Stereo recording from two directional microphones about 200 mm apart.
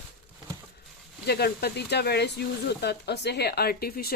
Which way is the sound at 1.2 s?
55° left (ahead or behind).